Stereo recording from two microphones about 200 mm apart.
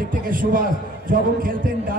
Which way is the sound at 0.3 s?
45° right (ahead or behind).